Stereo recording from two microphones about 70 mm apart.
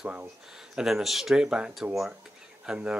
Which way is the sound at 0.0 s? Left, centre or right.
Right.